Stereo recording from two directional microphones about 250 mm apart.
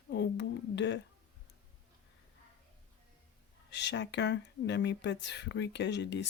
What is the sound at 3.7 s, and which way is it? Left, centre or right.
Speech, left.